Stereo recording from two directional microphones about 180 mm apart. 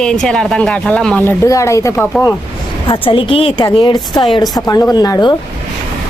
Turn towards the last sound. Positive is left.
turn(degrees=20)  # may be behind; listen again after turning